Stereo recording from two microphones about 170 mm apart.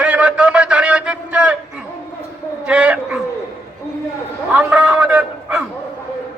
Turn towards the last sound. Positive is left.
turn(degrees=-10)  # may be behind; listen again after turning